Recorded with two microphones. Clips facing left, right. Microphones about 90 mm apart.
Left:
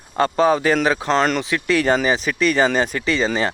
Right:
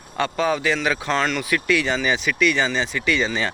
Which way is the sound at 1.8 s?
40° left (ahead or behind).